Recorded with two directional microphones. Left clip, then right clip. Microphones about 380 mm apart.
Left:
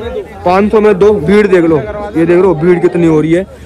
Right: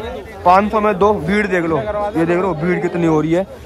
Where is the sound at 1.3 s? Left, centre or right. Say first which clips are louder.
Left 9 dB; right.